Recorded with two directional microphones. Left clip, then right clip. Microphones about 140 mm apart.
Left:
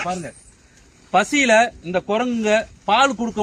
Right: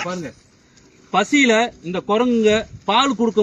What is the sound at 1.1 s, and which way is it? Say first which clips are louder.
Speech: left 1 dB; 40° left (ahead or behind).